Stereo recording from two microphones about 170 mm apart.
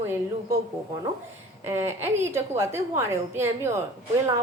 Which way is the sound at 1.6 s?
15° right (ahead or behind).